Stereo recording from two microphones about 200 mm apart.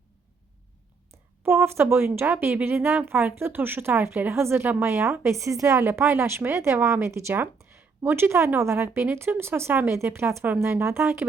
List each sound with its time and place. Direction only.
1.5 s speech: 10° right (ahead or behind)